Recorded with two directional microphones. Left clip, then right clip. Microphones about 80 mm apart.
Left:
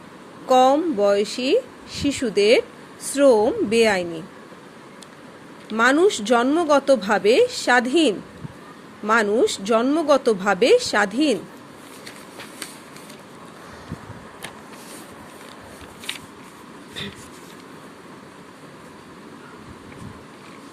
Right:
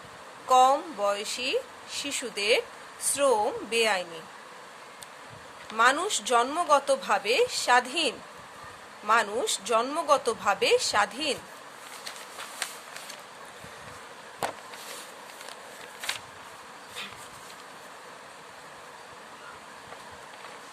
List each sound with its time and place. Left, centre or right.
0.4 s speech: left
5.7 s speech: left
9.2 s speech: left